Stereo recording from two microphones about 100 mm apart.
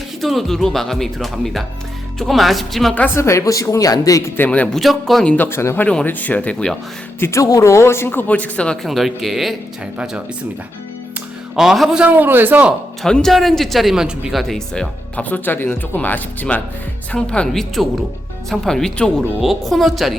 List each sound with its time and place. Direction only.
0.2 s speech: centre (ahead or behind)
3.2 s speech: 30° left (ahead or behind)
4.4 s speech: 15° left (ahead or behind)
4.8 s speech: centre (ahead or behind)
5.3 s speech: 20° left (ahead or behind)
7.2 s a man's voice: 30° left (ahead or behind); by 10.2 s 10° right (ahead or behind)
11.5 s speech: 5° right (ahead or behind)
12.0 s a man's voice: 20° right (ahead or behind)
13.0 s speech: 5° left (ahead or behind)